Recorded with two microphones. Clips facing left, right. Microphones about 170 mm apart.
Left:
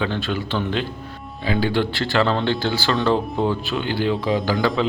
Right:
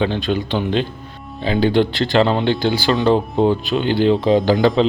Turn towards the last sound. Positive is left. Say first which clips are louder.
# right 6 dB
turn(degrees=-20)  # may be behind; listen again after turning